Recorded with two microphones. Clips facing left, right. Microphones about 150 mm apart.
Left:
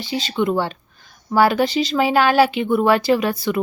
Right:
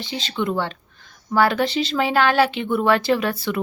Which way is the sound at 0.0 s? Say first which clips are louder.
Left 4 dB; 5° left (ahead or behind).